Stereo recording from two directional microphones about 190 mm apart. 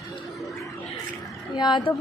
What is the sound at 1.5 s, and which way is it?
Speech, 25° left (ahead or behind).